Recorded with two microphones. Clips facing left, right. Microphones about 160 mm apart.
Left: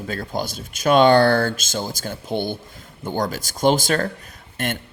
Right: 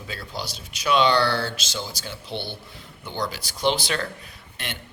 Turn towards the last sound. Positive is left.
turn(degrees=50)  # may be behind; listen again after turning